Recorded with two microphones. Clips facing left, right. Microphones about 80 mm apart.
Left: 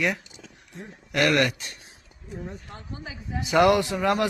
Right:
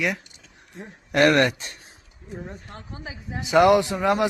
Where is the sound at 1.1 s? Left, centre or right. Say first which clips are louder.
Right 4 dB; right.